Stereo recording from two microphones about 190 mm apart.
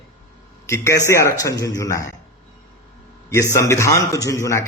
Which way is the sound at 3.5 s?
15° left (ahead or behind).